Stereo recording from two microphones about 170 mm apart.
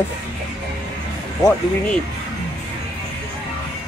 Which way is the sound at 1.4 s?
20° left (ahead or behind).